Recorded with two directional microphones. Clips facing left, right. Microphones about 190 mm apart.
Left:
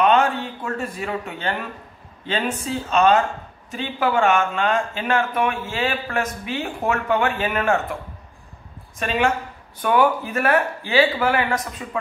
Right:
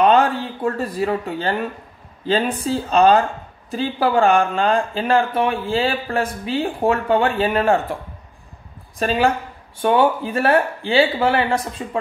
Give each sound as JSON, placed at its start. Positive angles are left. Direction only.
{"t": 0.0, "sound": "a sound", "side_deg": -35}
{"t": 2.2, "sound": "speech", "side_deg": -35}
{"t": 9.0, "sound": "speech", "side_deg": -35}